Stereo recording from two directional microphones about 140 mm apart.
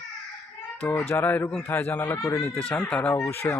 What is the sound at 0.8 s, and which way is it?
Speech, 15° left (ahead or behind).